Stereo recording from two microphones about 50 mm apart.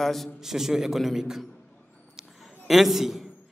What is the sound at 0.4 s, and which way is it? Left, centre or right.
A man's voice, centre.